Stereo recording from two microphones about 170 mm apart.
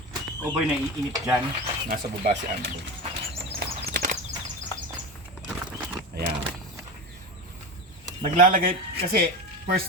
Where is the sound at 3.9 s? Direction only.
60° right (ahead or behind).